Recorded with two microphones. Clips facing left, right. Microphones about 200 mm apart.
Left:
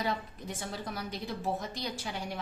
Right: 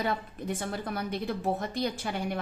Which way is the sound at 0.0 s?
55° right (ahead or behind).